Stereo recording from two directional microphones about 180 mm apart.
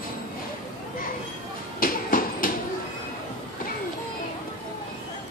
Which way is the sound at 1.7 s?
50° left (ahead or behind).